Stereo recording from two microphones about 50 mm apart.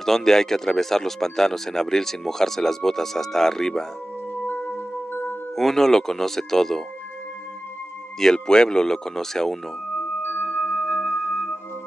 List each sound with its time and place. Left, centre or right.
0.0 s speech: centre
5.6 s speech: centre
8.2 s speech: centre
10.2 s music: left